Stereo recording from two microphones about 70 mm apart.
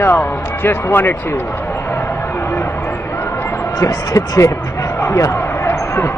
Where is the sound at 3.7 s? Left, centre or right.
Left.